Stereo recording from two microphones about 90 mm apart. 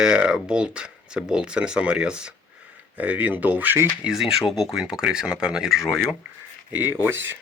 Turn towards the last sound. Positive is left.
turn(degrees=-25)  # may be behind; listen again after turning